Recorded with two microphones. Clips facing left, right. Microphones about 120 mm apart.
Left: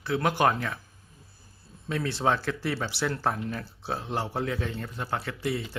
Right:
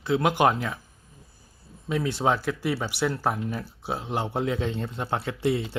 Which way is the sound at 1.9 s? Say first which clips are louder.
Right 2 dB; 15° right (ahead or behind).